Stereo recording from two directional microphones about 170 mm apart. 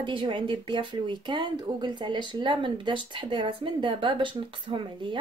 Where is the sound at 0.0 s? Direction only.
30° right (ahead or behind).